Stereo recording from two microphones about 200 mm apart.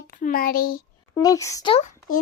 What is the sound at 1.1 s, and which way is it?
Speech, 15° left (ahead or behind).